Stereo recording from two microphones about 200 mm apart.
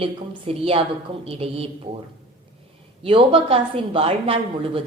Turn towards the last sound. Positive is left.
turn(degrees=-30)  # may be behind; listen again after turning